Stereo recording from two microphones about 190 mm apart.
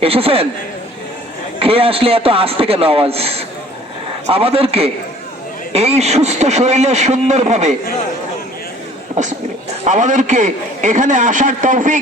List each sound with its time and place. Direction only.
0.0 s a man's voice: 30° right (ahead or behind)
1.5 s a man's voice: 30° right (ahead or behind)
9.2 s a man's voice: 40° right (ahead or behind)